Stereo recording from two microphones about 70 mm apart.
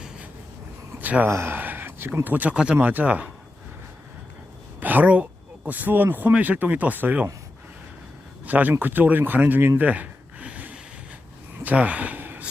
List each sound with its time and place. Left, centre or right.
0.9 s a sound: right
1.3 s a sound: right
2.2 s speech: right
4.8 s speech: right
8.4 s speech: right
9.8 s gasp: right
11.6 s speech: right